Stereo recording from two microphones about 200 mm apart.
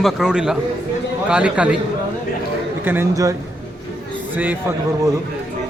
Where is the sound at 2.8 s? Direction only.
10° right (ahead or behind).